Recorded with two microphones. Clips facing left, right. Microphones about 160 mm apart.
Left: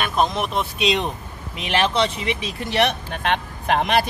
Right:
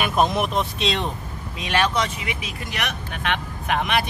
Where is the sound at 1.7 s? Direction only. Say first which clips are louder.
Left 2 dB; 30° left (ahead or behind).